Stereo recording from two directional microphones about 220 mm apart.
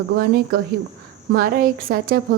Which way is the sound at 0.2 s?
45° right (ahead or behind).